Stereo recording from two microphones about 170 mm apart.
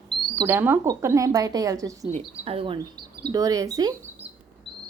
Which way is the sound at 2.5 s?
30° right (ahead or behind).